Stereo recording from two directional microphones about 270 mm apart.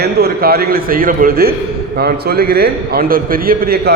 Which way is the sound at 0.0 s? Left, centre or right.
Right.